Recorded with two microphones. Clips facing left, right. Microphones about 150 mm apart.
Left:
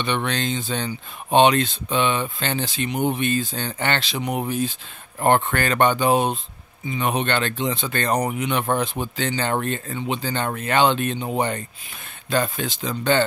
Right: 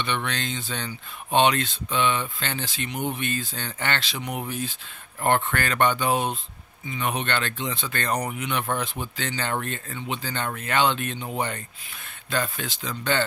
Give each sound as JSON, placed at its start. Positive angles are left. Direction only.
{"t": 0.0, "sound": "speech", "side_deg": 25}